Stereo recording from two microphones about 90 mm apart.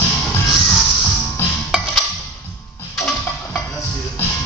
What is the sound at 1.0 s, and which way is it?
Music, 25° left (ahead or behind).